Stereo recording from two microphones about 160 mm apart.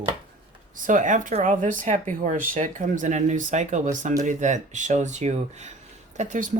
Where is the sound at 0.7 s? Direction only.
55° right (ahead or behind).